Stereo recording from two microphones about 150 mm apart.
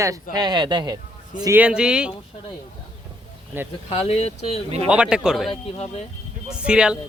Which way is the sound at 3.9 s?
40° left (ahead or behind).